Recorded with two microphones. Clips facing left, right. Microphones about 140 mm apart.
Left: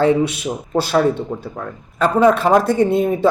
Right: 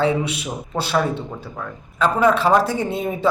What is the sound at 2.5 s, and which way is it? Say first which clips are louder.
Speech: left 5 dB; 45° left (ahead or behind).